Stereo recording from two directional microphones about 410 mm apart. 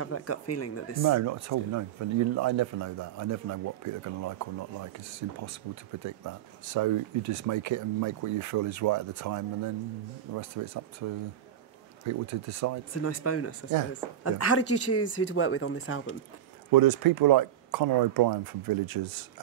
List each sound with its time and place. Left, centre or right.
0.0 s speech: left
1.0 s speech: right
12.1 s speech: right
13.0 s speech: left
16.7 s speech: right